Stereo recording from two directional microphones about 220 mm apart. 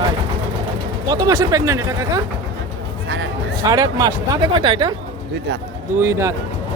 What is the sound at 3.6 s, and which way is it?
Speech, 15° right (ahead or behind).